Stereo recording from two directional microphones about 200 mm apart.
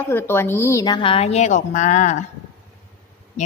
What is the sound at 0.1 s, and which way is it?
A woman's voice, 10° left (ahead or behind).